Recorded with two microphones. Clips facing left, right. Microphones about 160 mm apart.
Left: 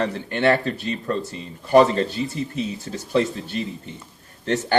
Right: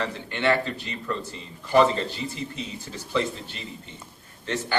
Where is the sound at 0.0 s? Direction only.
45° left (ahead or behind).